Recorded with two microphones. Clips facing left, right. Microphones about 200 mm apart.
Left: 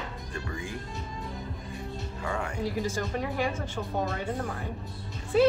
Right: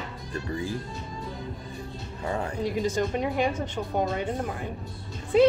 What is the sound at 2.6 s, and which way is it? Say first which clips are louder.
Speech: right 6 dB; 20° right (ahead or behind).